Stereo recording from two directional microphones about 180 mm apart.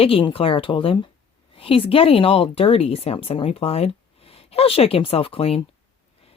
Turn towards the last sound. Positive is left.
turn(degrees=30)  # may be behind; listen again after turning